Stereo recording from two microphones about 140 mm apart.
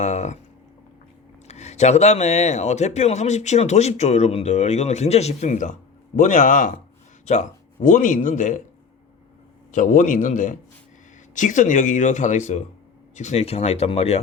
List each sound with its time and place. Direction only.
0.0 s a sound: 55° left (ahead or behind)
1.5 s speech: 50° left (ahead or behind)
9.7 s speech: 65° left (ahead or behind); by 14.2 s 45° left (ahead or behind)